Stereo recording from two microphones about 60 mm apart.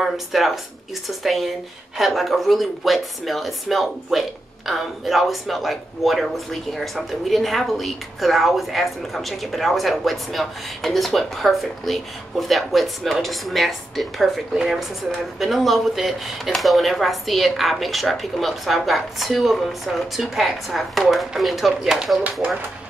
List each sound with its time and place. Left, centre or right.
0.0 s a woman's voice: centre
22.4 s speech: right